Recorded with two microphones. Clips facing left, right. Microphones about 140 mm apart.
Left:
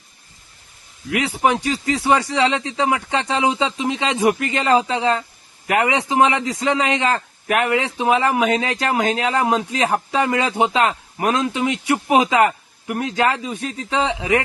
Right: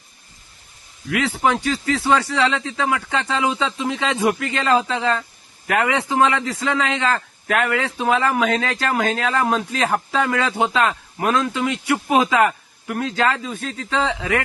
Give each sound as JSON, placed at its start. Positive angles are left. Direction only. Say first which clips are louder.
{"t": 1.1, "sound": "a man's voice", "louder": "left 1 dB", "side_deg": 15}